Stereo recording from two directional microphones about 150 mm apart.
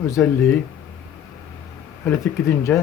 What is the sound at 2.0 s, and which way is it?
Speech, 15° left (ahead or behind).